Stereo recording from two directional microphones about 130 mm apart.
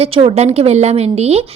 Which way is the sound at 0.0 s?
45° right (ahead or behind).